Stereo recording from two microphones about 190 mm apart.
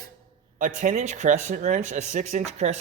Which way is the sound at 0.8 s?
40° right (ahead or behind).